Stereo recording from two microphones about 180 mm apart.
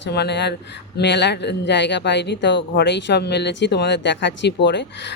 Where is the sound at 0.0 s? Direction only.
70° left (ahead or behind).